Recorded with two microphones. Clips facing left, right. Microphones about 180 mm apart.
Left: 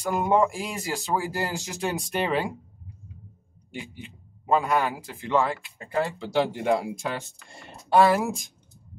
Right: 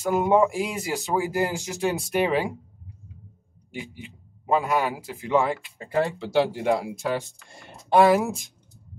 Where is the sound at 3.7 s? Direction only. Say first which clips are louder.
Right 1 dB; 10° right (ahead or behind).